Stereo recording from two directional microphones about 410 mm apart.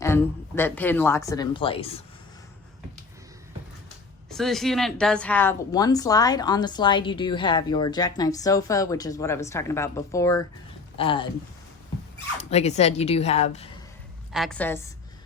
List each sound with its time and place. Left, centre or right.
0.0 s a woman's voice: centre
4.3 s a woman's voice: centre
12.4 s a woman's voice: centre
14.3 s a woman's voice: centre